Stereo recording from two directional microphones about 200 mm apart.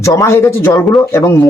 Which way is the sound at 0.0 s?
15° left (ahead or behind).